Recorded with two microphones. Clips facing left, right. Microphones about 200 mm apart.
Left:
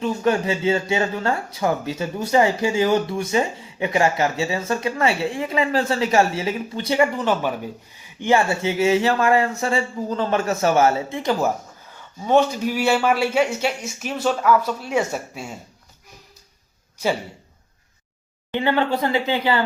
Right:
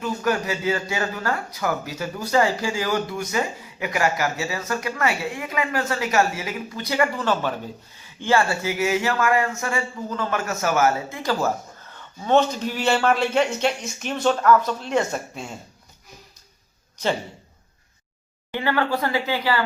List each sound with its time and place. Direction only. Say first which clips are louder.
0.0 s speech: left 4 dB; 25° left (ahead or behind); by 15.5 s 5° left (ahead or behind)
18.5 s speech: left 3 dB; 20° left (ahead or behind)